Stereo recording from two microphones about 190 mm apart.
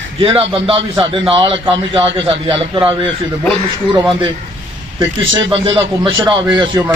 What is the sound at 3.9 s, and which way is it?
Speech, 25° right (ahead or behind).